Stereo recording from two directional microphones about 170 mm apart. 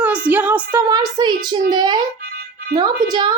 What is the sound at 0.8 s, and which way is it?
A woman's voice, 20° right (ahead or behind).